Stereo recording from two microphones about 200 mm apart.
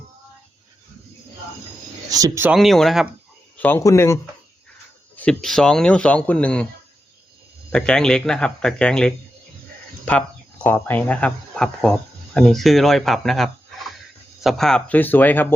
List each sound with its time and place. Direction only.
2.0 s speech: 15° right (ahead or behind)
2.6 s speech: centre (ahead or behind)
3.6 s speech: 10° left (ahead or behind)
7.7 s speech: 5° left (ahead or behind)